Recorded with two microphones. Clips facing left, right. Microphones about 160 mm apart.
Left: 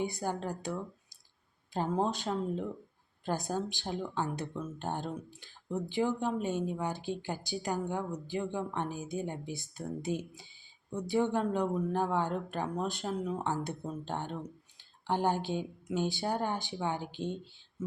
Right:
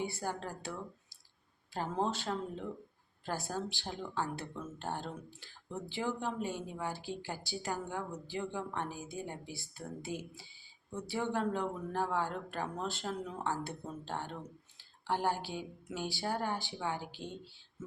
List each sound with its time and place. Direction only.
0.0 s speech: 15° left (ahead or behind)